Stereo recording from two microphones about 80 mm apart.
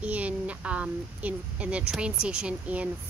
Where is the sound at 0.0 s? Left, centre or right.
Centre.